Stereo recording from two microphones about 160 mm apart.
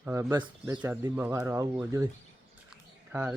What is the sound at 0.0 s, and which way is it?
Speech, 15° right (ahead or behind).